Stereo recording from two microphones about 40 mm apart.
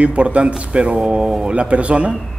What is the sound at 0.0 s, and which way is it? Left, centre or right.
Speech, right.